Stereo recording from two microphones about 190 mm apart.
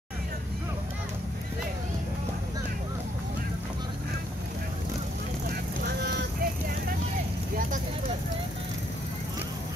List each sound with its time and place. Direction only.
5.9 s vehicle: 55° right (ahead or behind)